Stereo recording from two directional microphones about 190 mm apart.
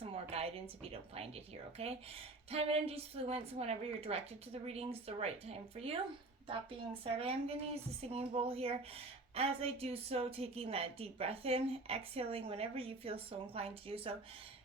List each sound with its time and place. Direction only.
0.0 s a woman's voice: 30° right (ahead or behind)